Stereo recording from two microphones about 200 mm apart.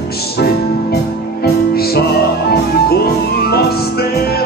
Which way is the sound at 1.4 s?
50° left (ahead or behind).